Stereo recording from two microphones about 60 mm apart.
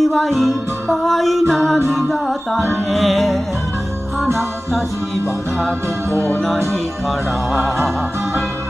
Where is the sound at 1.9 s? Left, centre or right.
Centre.